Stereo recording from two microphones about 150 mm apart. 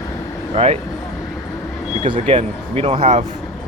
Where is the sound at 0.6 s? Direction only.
40° right (ahead or behind).